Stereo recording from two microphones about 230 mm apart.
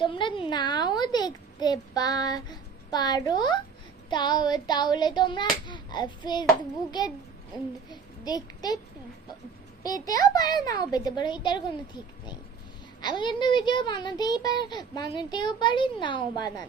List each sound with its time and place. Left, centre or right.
0.0 s a child's voice: left
7.9 s a child's voice: centre
9.8 s a child's voice: centre
13.0 s a child's voice: centre